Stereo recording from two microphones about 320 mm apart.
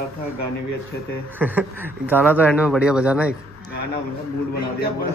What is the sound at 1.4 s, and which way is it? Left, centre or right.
Speech, centre.